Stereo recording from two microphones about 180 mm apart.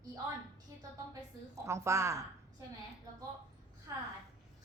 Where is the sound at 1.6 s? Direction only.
15° right (ahead or behind).